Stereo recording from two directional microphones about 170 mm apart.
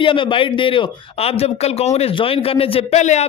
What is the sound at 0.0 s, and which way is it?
A man's voice, 30° left (ahead or behind).